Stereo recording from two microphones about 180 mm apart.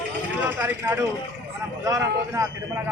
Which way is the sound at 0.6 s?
10° right (ahead or behind).